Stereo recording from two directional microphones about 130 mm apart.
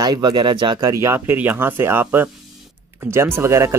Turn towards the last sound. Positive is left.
turn(degrees=-20)  # may be behind; listen again after turning